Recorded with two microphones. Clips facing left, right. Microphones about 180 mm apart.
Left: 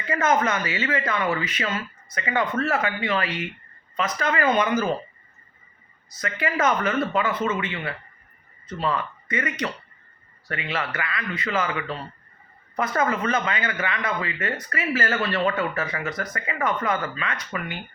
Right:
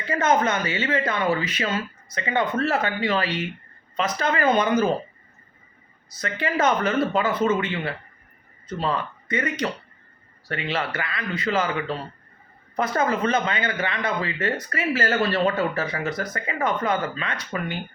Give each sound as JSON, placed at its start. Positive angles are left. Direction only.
{"t": 0.0, "sound": "speech", "side_deg": -30}
{"t": 6.2, "sound": "speech", "side_deg": -30}